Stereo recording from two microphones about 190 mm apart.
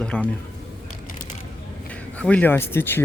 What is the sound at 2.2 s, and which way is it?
Speech, 10° left (ahead or behind).